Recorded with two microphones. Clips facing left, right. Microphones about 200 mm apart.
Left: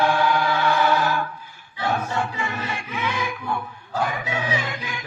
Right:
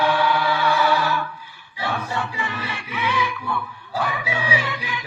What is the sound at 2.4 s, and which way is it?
Music, 50° left (ahead or behind).